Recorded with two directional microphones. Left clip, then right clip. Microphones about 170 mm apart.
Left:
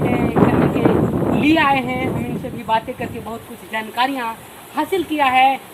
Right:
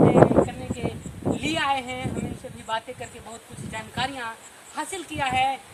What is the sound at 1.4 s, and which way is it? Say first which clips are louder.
Speech: left 10 dB; 25° right (ahead or behind).